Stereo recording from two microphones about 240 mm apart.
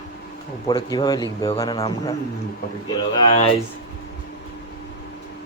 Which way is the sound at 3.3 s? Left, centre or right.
Left.